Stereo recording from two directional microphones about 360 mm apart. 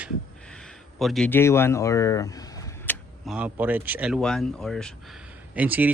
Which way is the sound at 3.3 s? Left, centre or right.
Centre.